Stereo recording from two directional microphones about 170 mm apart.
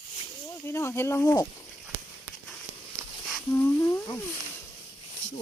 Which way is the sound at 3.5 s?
15° left (ahead or behind).